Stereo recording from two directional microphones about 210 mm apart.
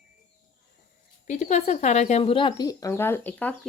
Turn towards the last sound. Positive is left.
turn(degrees=10)  # may be behind; listen again after turning